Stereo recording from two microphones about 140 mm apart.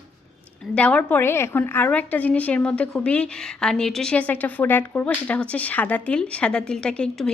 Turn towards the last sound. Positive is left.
turn(degrees=5)  # may be behind; listen again after turning